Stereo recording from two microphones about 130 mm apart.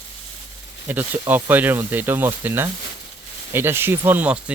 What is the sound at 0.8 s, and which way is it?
Speech, 15° right (ahead or behind).